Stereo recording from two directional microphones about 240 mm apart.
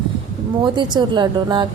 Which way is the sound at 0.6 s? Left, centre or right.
Centre.